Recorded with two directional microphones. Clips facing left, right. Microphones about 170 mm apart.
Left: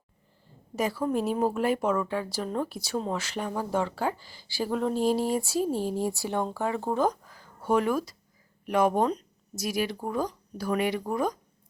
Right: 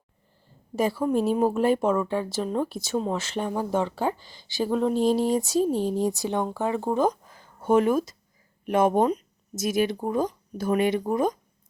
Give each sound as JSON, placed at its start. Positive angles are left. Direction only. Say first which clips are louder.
{"t": 0.8, "sound": "speech", "louder": "right 4 dB", "side_deg": -30}
{"t": 1.1, "sound": "speech", "louder": "right 4 dB", "side_deg": 0}
{"t": 1.4, "sound": "speech", "louder": "right 4 dB", "side_deg": -25}